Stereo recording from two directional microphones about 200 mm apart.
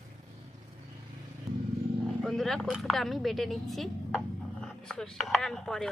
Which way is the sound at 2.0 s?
Centre (ahead or behind).